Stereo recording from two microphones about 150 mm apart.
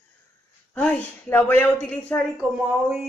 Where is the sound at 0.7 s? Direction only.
10° left (ahead or behind).